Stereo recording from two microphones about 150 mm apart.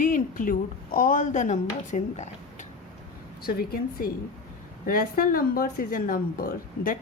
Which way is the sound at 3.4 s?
90° left.